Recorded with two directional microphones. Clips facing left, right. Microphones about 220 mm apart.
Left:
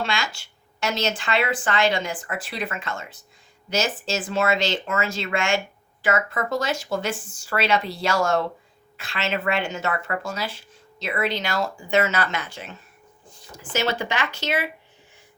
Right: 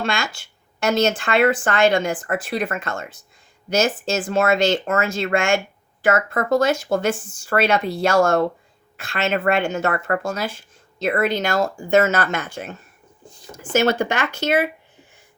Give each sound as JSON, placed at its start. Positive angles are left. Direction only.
{"t": 0.0, "sound": "speech", "side_deg": -50}